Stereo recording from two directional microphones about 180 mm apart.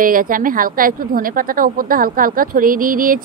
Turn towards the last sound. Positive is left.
turn(degrees=-50)  # may be behind; listen again after turning